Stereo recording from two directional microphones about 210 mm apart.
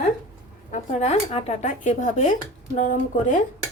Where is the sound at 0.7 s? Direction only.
30° left (ahead or behind).